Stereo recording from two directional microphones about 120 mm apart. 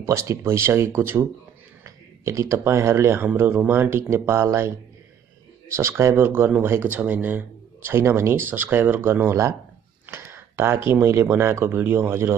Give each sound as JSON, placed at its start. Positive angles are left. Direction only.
{"t": 0.0, "sound": "speech", "side_deg": -25}
{"t": 10.0, "sound": "a sound", "side_deg": -20}
{"t": 10.9, "sound": "speech", "side_deg": -20}